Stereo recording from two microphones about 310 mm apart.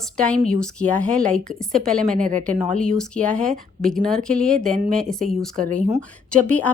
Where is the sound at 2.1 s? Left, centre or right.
Right.